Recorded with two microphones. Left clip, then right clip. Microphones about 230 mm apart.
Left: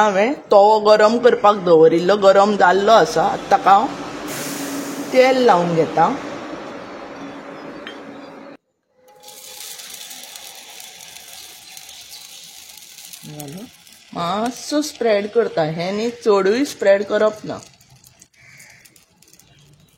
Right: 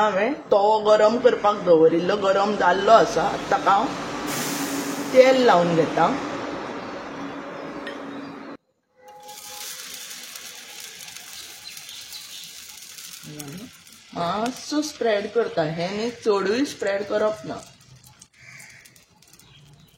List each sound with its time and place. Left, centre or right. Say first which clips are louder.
0.0 s speech: left 5 dB; left
5.1 s a woman's voice: left 2 dB; left
9.5 s a sound: left 2 dB; centre
11.1 s water: left 1 dB; centre
12.1 s ratchet: even; centre
14.1 s speech: left 4 dB; left